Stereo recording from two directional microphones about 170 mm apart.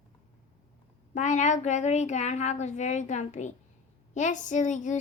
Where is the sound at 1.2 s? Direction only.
45° left (ahead or behind).